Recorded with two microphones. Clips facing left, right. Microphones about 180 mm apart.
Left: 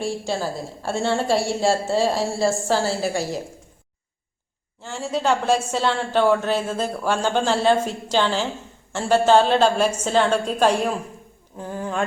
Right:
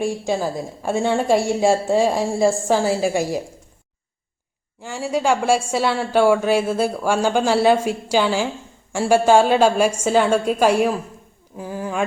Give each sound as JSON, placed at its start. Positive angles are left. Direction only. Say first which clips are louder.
{"t": 0.0, "sound": "a woman's voice", "louder": "right 3 dB", "side_deg": -15}
{"t": 4.8, "sound": "a woman's voice", "louder": "right 3 dB", "side_deg": -10}